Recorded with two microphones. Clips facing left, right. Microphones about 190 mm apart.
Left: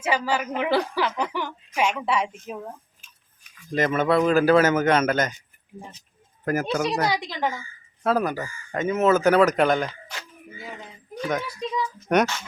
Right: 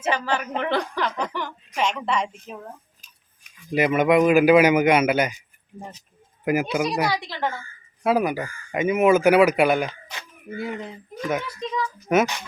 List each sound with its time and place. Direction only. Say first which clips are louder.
0.0 s a woman's voice: even; 10° left (ahead or behind)
3.0 s scissors: left 1 dB; 40° right (ahead or behind)
3.7 s a man's voice: right 3 dB; 10° right (ahead or behind)
6.4 s a man's voice: right 2 dB; 10° right (ahead or behind)
7.1 s a woman's voice: even; 20° left (ahead or behind)
8.0 s a man's voice: right 2 dB; 10° right (ahead or behind)
10.5 s speech: right 10 dB; 65° right (ahead or behind)
11.1 s speech: even; 10° right (ahead or behind)
11.4 s a woman's voice: even; 10° left (ahead or behind)
12.1 s speech: right 1 dB; 5° right (ahead or behind)